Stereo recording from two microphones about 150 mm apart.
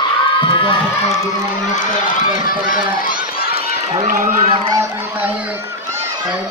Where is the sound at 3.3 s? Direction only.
85° left.